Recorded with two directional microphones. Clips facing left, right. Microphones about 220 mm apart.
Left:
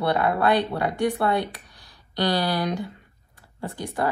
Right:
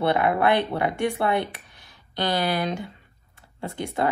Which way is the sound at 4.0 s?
20° right (ahead or behind).